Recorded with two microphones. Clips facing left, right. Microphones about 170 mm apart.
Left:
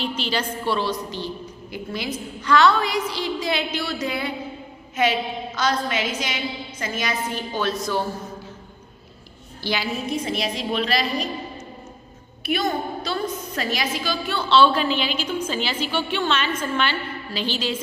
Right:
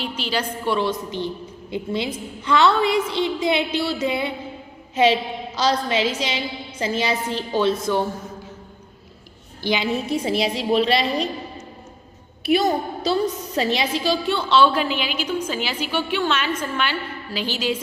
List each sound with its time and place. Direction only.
0.2 s a woman's voice: 10° right (ahead or behind)
5.5 s a woman's voice: 30° right (ahead or behind)
9.6 s a woman's voice: 20° right (ahead or behind)
10.1 s a woman's voice: 30° right (ahead or behind)
12.5 s a woman's voice: 30° right (ahead or behind)
14.3 s a woman's voice: 15° right (ahead or behind)